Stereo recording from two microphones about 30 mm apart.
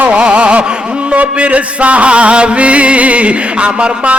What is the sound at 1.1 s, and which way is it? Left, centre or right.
Music, right.